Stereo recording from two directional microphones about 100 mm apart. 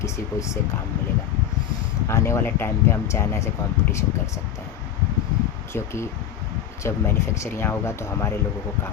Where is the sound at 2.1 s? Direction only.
25° left (ahead or behind).